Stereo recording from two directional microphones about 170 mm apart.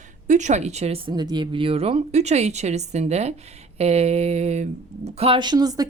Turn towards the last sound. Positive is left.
turn(degrees=-20)  # may be behind; listen again after turning